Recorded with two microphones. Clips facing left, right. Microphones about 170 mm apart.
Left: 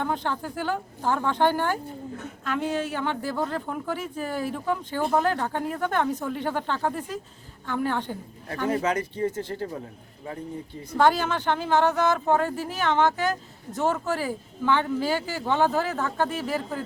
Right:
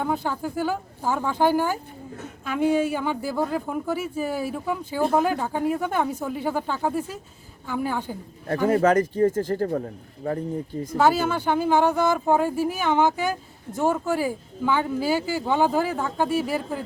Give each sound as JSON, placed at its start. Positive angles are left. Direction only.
{"t": 0.0, "sound": "speech", "side_deg": -10}
{"t": 8.7, "sound": "speech", "side_deg": -50}
{"t": 10.9, "sound": "speech", "side_deg": -5}